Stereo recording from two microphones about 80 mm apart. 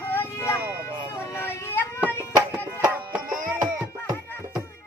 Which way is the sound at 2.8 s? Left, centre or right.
Centre.